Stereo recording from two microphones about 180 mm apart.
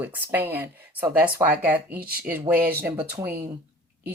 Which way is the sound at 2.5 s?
55° right (ahead or behind).